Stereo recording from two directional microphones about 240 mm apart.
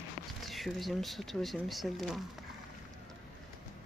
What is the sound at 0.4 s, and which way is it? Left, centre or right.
Speech, centre.